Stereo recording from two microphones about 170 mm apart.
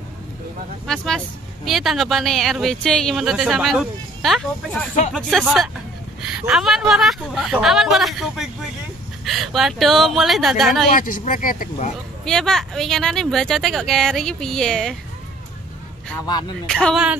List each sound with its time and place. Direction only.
0.8 s speech: 5° left (ahead or behind)
10.9 s speech: 55° left (ahead or behind)
12.3 s speech: 5° left (ahead or behind)
16.3 s speech: 25° left (ahead or behind)
16.6 s speech: 5° left (ahead or behind)